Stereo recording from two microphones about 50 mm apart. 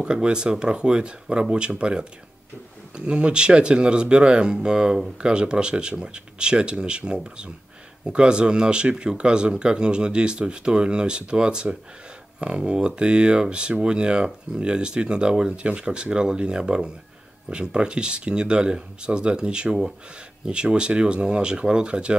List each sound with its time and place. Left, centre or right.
0.0 s speech: centre
3.1 s speech: centre